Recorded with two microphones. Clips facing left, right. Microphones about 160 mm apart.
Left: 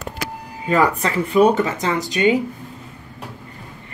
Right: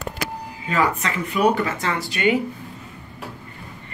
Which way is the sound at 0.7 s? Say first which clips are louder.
Left 4 dB; 30° left (ahead or behind).